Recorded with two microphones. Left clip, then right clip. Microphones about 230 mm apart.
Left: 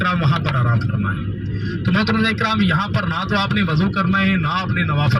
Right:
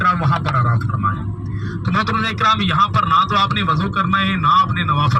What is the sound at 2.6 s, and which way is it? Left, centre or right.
A man's voice, right.